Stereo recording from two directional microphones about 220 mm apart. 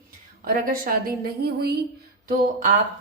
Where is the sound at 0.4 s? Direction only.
40° right (ahead or behind).